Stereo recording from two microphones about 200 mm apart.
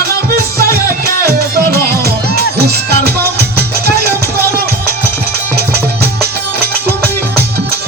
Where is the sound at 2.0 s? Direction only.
50° right (ahead or behind).